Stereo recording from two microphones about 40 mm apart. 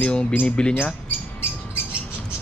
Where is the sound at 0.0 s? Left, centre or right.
Left.